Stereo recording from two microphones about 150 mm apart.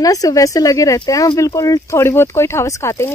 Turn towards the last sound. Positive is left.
turn(degrees=20)  # may be behind; listen again after turning